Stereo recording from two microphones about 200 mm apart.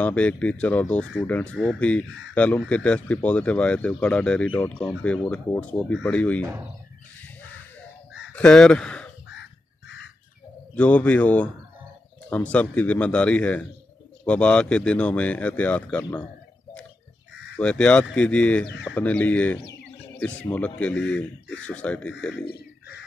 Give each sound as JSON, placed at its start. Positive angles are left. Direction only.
{"t": 0.0, "sound": "speech", "side_deg": 5}
{"t": 6.4, "sound": "speech", "side_deg": -10}
{"t": 8.4, "sound": "speech", "side_deg": 5}
{"t": 9.4, "sound": "crow", "side_deg": 65}
{"t": 10.7, "sound": "speech", "side_deg": 5}
{"t": 17.6, "sound": "speech", "side_deg": 5}
{"t": 22.4, "sound": "crow", "side_deg": 50}